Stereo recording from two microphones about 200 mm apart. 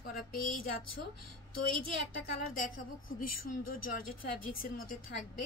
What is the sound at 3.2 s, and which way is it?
Speech, 45° left (ahead or behind).